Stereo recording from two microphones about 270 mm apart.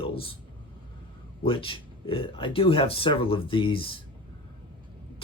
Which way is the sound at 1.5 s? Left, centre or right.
Centre.